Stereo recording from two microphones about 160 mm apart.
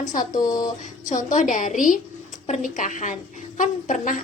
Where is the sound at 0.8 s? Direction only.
50° left (ahead or behind).